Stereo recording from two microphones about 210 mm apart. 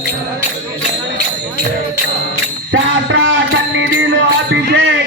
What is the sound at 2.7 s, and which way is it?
Music, 65° right (ahead or behind).